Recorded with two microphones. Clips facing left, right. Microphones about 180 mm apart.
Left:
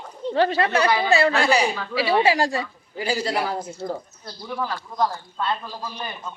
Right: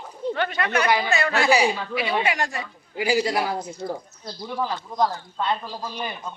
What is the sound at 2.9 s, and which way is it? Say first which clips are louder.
Speech: right 2 dB; 10° right (ahead or behind).